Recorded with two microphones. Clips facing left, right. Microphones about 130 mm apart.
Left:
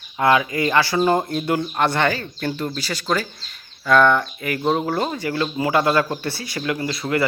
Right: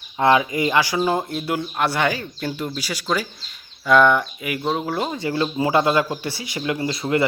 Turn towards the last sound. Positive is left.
turn(degrees=-20)  # may be behind; listen again after turning